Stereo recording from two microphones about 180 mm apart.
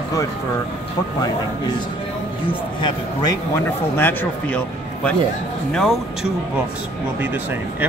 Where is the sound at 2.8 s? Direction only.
25° left (ahead or behind).